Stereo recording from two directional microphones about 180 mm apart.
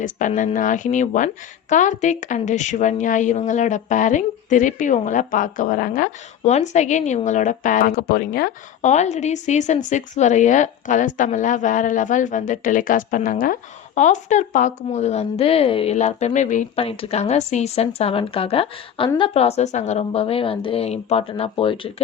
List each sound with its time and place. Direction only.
0.0 s a woman's voice: 45° left (ahead or behind)
8.8 s a woman's voice: 40° left (ahead or behind)